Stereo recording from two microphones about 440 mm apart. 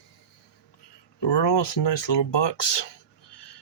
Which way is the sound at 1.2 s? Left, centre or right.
Left.